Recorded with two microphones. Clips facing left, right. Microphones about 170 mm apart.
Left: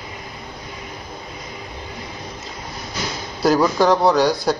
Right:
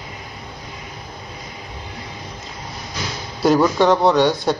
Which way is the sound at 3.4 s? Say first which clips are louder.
Right 1 dB; centre (ahead or behind).